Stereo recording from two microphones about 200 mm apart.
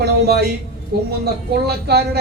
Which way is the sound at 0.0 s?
55° right (ahead or behind).